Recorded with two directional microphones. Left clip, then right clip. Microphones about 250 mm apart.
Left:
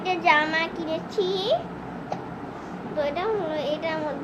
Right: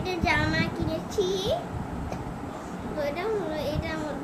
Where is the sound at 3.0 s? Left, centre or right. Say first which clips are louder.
Left 3 dB; centre.